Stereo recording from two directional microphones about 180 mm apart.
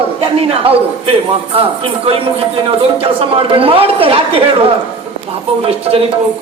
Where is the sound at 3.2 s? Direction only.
30° right (ahead or behind).